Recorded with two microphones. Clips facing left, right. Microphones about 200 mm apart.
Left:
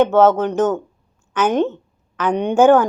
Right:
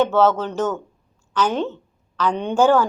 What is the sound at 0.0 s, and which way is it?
A woman's voice, 20° left (ahead or behind).